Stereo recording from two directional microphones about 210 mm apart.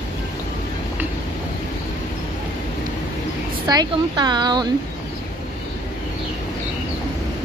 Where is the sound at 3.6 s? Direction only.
20° right (ahead or behind).